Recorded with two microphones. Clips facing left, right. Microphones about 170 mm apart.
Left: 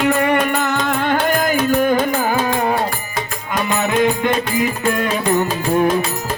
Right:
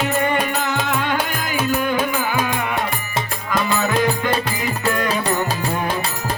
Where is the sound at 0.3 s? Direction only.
55° left (ahead or behind); by 2.9 s 35° left (ahead or behind).